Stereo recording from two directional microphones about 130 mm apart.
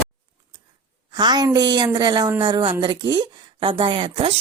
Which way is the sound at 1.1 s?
30° right (ahead or behind).